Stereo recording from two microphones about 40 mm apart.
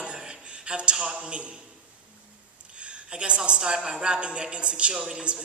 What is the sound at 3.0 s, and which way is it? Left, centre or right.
A woman's voice, right.